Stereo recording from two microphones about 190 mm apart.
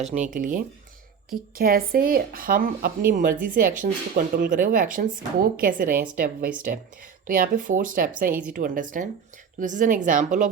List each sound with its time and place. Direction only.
0.0 s speech: 40° right (ahead or behind)